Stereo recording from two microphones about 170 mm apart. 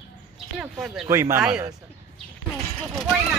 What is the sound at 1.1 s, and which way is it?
Speech, 15° right (ahead or behind).